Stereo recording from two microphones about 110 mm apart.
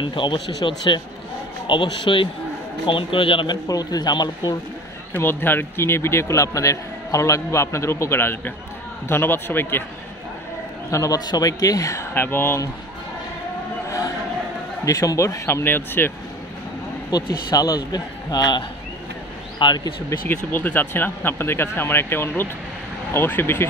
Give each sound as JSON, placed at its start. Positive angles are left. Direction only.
{"t": 0.0, "sound": "speech", "side_deg": 50}
{"t": 3.6, "sound": "a man's voice", "side_deg": 35}
{"t": 5.1, "sound": "a man's voice", "side_deg": 20}
{"t": 10.9, "sound": "a man's voice", "side_deg": 30}
{"t": 13.8, "sound": "a sound", "side_deg": 30}
{"t": 14.9, "sound": "a man's voice", "side_deg": 30}
{"t": 17.1, "sound": "a man's voice", "side_deg": 35}
{"t": 19.6, "sound": "a man's voice", "side_deg": 40}
{"t": 20.5, "sound": "a man's voice", "side_deg": 15}